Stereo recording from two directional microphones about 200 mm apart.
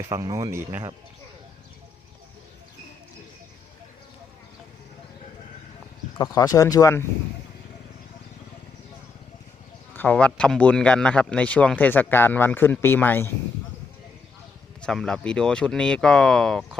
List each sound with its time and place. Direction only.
0.1 s speech: 15° right (ahead or behind)
6.1 s a man's voice: 20° left (ahead or behind)
9.9 s a man's voice: 10° left (ahead or behind)
14.8 s speech: 5° left (ahead or behind)